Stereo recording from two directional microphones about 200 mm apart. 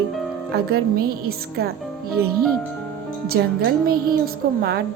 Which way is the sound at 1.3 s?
50° right (ahead or behind).